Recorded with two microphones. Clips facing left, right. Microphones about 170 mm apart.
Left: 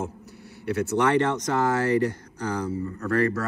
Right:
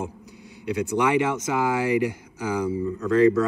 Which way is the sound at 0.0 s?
15° right (ahead or behind).